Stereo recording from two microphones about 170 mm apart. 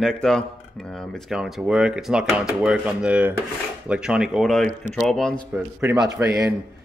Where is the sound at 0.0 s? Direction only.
5° left (ahead or behind).